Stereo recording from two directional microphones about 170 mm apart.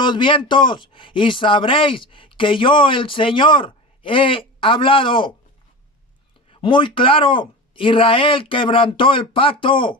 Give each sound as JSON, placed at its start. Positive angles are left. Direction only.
{"t": 0.0, "sound": "speech", "side_deg": 30}
{"t": 6.5, "sound": "speech", "side_deg": 30}